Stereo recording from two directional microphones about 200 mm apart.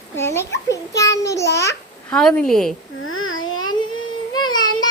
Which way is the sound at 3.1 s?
90° left.